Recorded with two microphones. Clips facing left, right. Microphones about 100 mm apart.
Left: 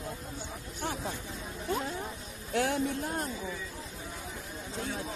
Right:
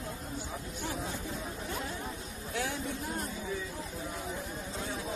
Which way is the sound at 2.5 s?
55° left (ahead or behind).